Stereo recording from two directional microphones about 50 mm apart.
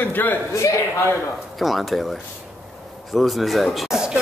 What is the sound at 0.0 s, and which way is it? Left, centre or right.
Speech, left.